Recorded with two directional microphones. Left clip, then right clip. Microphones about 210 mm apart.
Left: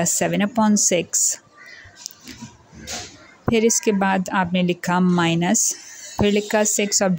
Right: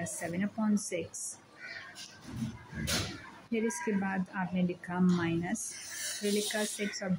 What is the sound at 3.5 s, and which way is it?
Speech, 45° left (ahead or behind).